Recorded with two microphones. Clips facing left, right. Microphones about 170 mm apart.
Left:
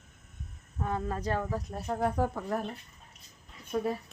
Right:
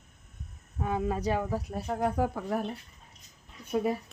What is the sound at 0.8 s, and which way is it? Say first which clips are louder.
Speech: right 3 dB; 10° right (ahead or behind).